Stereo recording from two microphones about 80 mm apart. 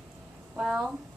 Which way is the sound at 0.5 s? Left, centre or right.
Centre.